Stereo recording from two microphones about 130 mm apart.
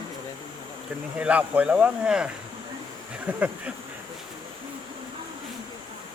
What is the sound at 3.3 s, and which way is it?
Speech, 10° right (ahead or behind).